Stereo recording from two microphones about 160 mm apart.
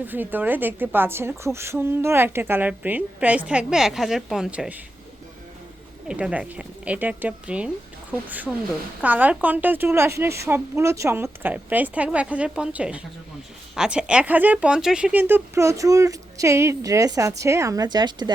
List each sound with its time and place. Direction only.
0.0 s a woman's voice: 10° right (ahead or behind)
6.1 s a woman's voice: 5° right (ahead or behind); by 18.3 s 25° right (ahead or behind)